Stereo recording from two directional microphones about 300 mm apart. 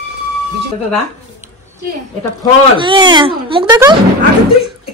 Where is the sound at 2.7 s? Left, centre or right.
Centre.